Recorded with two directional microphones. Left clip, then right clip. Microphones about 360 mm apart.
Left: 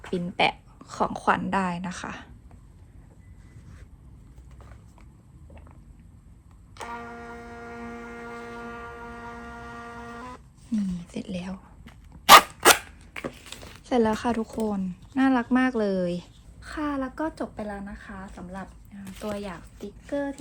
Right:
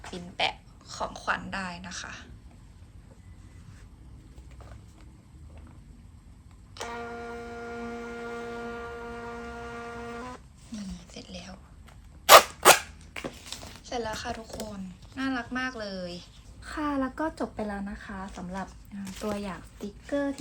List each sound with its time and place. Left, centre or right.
0.1 s a woman's voice: centre
6.7 s a sound: centre
11.1 s whispering: centre
11.9 s dog: centre
13.1 s a sound: centre
13.8 s a woman's voice: centre
16.6 s a woman's voice: centre